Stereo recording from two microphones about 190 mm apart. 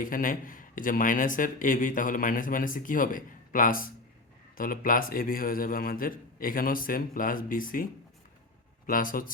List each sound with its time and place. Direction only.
0.0 s a man's voice: 45° left (ahead or behind)
8.9 s a man's voice: 45° left (ahead or behind)